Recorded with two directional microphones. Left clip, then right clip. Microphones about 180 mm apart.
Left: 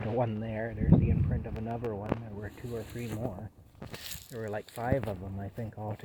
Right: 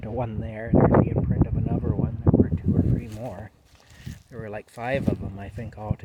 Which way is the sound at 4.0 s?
60° left (ahead or behind).